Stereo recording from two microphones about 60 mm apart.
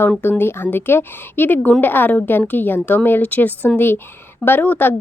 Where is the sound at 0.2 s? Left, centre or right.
Left.